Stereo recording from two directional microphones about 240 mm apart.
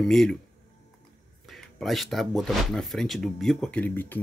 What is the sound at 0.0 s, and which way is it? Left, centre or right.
Speech, centre.